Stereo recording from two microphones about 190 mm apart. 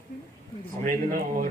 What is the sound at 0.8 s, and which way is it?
Speech, 50° right (ahead or behind).